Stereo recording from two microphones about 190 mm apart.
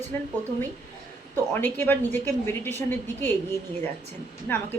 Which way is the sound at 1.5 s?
10° left (ahead or behind).